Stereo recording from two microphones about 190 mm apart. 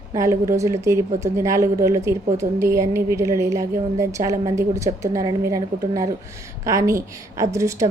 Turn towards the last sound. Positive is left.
turn(degrees=-15)  # may be behind; listen again after turning